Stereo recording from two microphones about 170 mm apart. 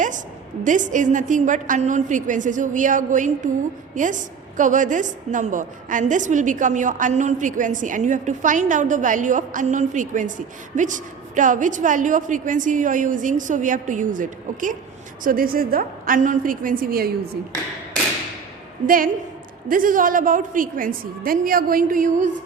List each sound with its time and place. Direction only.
0.6 s a woman's voice: 50° right (ahead or behind)
18.9 s a woman's voice: 55° right (ahead or behind)